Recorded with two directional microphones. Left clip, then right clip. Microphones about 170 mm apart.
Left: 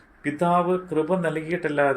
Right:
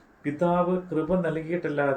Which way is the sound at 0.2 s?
50° left (ahead or behind).